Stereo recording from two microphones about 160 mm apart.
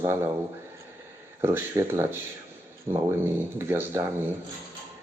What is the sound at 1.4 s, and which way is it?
Speech, 15° right (ahead or behind).